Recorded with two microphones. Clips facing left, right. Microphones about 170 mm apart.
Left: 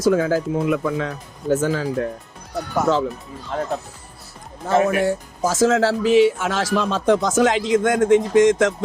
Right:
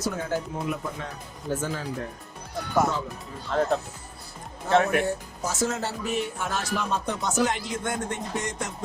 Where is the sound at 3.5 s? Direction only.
10° left (ahead or behind).